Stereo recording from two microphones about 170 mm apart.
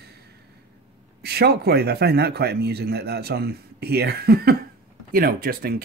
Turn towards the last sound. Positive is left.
turn(degrees=-60)  # may be behind; listen again after turning